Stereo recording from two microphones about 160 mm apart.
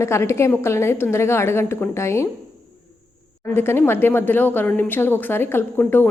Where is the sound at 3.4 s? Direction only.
15° left (ahead or behind).